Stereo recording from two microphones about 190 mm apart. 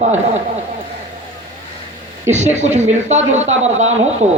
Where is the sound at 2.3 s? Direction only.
35° right (ahead or behind).